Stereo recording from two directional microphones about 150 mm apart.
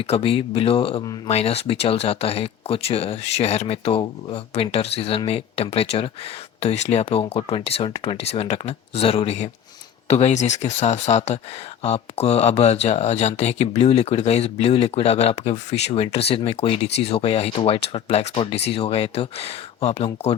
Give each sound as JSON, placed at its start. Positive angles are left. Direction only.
{"t": 0.0, "sound": "speech", "side_deg": 40}